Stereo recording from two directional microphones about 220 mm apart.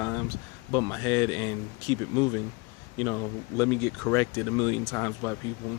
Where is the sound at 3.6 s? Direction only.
10° left (ahead or behind).